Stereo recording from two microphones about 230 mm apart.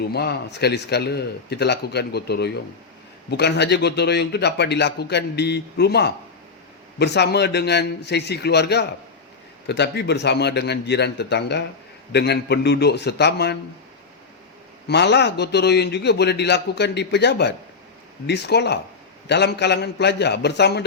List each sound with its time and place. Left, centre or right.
0.0 s a man's voice: left
14.8 s a man's voice: left